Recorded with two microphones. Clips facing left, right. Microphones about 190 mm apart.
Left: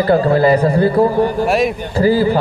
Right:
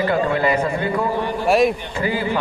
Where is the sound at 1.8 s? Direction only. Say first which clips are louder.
Left 9 dB; 35° left (ahead or behind).